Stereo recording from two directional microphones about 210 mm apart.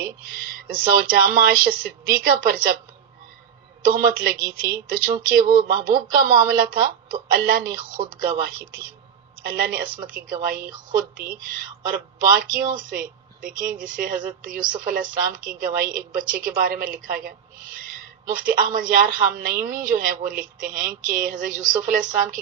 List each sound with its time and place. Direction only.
0.0 s speech: 45° right (ahead or behind)
3.8 s a woman's voice: 45° right (ahead or behind)